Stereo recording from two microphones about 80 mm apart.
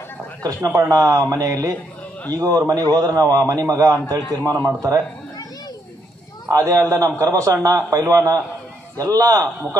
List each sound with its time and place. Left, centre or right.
0.4 s speech: right
0.7 s a man's voice: right
0.9 s a man's voice: right
6.5 s a man's voice: right